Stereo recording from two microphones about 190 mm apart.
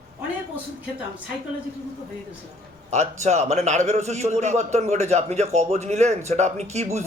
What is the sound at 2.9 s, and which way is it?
A man's voice, 35° right (ahead or behind).